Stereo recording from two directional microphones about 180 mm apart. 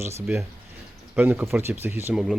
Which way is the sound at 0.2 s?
15° right (ahead or behind).